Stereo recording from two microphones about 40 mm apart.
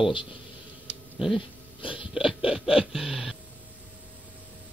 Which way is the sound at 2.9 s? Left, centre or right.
Centre.